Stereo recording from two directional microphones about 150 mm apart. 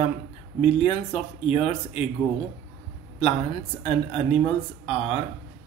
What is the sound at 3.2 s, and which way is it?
Speech, 40° left (ahead or behind).